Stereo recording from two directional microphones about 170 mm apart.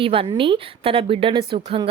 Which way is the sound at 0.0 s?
30° right (ahead or behind).